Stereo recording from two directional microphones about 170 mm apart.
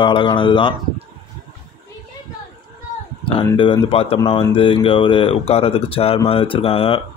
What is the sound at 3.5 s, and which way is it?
Speech, 30° left (ahead or behind).